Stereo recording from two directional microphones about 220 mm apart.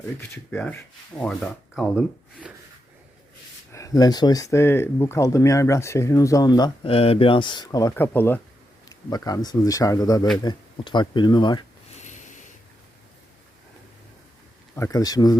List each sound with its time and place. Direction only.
0.2 s speech: 10° left (ahead or behind)
3.7 s speech: 15° left (ahead or behind)
11.9 s snort: 35° left (ahead or behind)
14.8 s speech: 15° left (ahead or behind)